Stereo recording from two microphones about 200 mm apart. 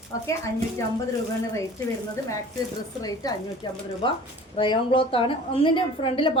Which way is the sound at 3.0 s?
20° left (ahead or behind).